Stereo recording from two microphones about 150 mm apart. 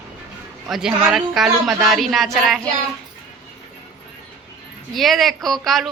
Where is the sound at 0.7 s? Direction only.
5° right (ahead or behind).